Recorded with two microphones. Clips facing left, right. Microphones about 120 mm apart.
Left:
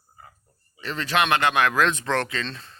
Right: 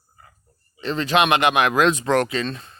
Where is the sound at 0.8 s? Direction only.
20° right (ahead or behind).